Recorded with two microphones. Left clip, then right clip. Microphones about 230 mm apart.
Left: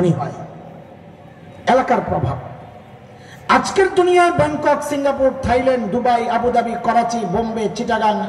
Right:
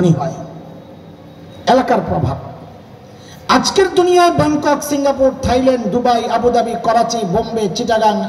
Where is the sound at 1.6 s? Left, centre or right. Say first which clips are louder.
Right 2 dB; right.